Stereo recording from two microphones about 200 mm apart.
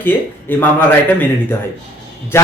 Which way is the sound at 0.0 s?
10° left (ahead or behind).